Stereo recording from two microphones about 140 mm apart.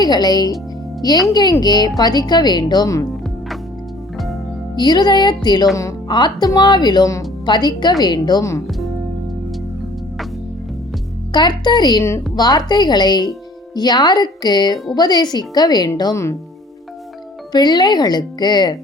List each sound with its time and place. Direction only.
0.0 s speech: 30° left (ahead or behind)
4.7 s speech: 30° left (ahead or behind)
11.3 s speech: 30° left (ahead or behind)
17.5 s speech: 30° left (ahead or behind)